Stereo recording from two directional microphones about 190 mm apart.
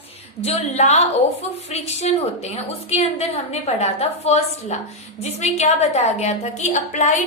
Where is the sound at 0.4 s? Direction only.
35° left (ahead or behind).